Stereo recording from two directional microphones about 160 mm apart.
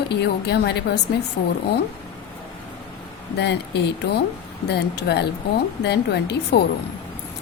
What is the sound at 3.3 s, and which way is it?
A woman's voice, 90° left.